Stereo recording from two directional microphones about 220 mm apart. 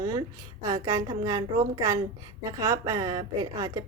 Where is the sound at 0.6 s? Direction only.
15° right (ahead or behind).